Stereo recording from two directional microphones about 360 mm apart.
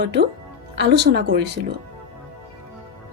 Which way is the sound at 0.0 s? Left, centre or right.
Right.